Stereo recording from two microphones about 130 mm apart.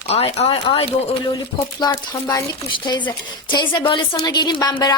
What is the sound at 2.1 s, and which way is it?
A woman's voice, 30° left (ahead or behind).